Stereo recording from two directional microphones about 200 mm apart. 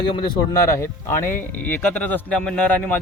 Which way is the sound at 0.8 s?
10° left (ahead or behind).